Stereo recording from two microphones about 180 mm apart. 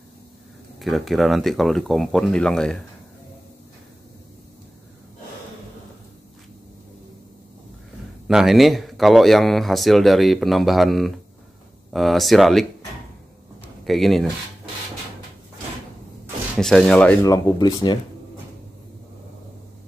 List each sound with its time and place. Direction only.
0.7 s a man's voice: centre (ahead or behind)
8.3 s a man's voice: centre (ahead or behind)
13.8 s a man's voice: centre (ahead or behind)
16.5 s a man's voice: 5° left (ahead or behind)
17.2 s speech: 20° left (ahead or behind)